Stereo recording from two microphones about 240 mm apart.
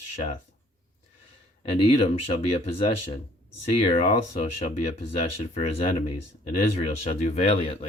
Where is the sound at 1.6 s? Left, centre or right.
Left.